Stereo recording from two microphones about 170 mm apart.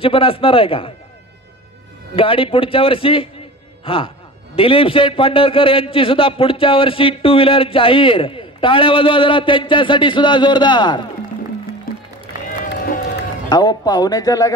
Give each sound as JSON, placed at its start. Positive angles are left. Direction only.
{"t": 0.0, "sound": "a man's voice", "side_deg": 35}
{"t": 2.1, "sound": "a man's voice", "side_deg": 30}
{"t": 11.9, "sound": "music", "side_deg": 55}
{"t": 12.4, "sound": "run", "side_deg": 55}
{"t": 13.5, "sound": "a man's voice", "side_deg": 25}